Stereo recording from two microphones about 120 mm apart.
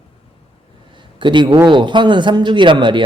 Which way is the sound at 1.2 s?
40° right (ahead or behind).